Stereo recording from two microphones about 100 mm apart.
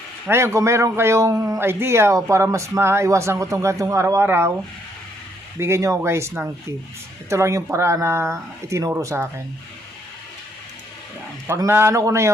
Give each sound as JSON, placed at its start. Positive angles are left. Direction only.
{"t": 0.3, "sound": "a man's voice", "side_deg": -25}
{"t": 5.5, "sound": "a man's voice", "side_deg": -25}
{"t": 11.4, "sound": "a man's voice", "side_deg": -30}